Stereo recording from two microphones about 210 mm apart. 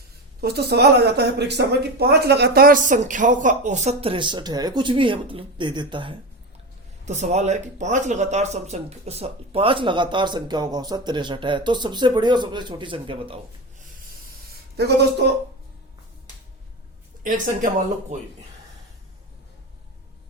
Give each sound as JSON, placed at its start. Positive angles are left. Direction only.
{"t": 0.4, "sound": "speech", "side_deg": -50}
{"t": 7.0, "sound": "speech", "side_deg": -35}
{"t": 14.8, "sound": "speech", "side_deg": -55}
{"t": 17.2, "sound": "speech", "side_deg": -40}